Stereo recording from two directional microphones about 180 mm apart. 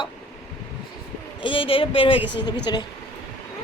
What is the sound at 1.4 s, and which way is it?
A woman's voice, 30° left (ahead or behind).